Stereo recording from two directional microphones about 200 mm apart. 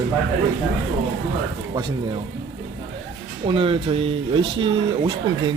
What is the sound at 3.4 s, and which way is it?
Speech, 25° right (ahead or behind).